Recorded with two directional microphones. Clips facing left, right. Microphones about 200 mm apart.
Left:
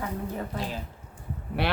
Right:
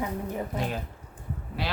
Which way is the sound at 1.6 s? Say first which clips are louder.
Left 5 dB; 60° left (ahead or behind).